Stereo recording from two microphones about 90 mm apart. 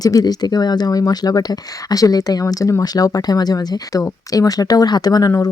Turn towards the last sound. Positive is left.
turn(degrees=45)  # may be behind; listen again after turning